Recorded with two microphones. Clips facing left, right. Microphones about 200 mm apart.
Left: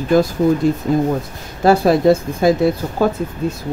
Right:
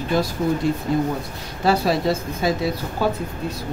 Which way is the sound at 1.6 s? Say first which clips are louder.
Left 7 dB; 50° left (ahead or behind).